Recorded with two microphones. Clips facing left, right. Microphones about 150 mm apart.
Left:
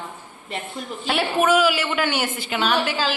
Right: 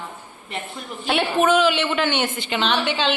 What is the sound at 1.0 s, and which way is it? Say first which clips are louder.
A man's voice: right 1 dB; centre (ahead or behind).